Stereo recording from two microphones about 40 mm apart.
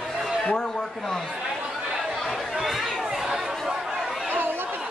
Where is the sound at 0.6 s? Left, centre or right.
Centre.